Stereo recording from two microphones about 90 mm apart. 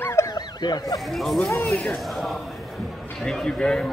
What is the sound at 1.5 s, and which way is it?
Speech, 20° left (ahead or behind).